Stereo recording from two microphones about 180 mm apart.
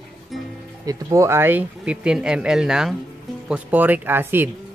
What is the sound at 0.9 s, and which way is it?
Speech, 15° right (ahead or behind).